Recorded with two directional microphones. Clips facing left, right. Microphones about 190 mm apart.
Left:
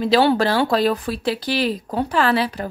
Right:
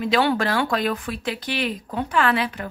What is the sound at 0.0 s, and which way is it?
Speech, 30° left (ahead or behind).